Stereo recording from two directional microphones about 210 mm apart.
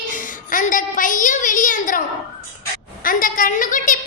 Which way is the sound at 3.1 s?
40° left (ahead or behind).